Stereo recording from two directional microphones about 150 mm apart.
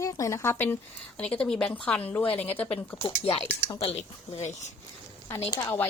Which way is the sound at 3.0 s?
40° left (ahead or behind).